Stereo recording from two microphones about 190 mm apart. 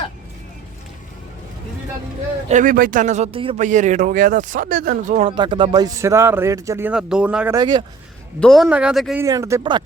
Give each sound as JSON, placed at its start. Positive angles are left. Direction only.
{"t": 2.5, "sound": "speech", "side_deg": -45}
{"t": 5.3, "sound": "speech", "side_deg": -25}
{"t": 7.5, "sound": "speech", "side_deg": -25}
{"t": 8.4, "sound": "speech", "side_deg": 0}
{"t": 9.2, "sound": "speech", "side_deg": -15}